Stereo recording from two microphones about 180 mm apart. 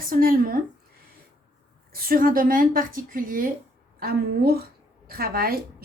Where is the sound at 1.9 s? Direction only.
55° right (ahead or behind).